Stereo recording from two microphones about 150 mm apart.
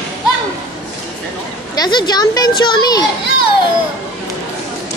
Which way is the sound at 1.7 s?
30° left (ahead or behind).